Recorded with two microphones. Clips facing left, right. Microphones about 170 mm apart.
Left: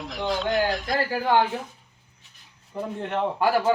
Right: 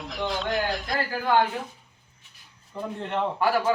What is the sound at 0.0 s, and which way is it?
Speech, centre (ahead or behind).